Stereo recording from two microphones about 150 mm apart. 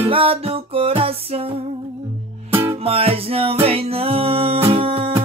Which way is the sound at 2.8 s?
40° right (ahead or behind).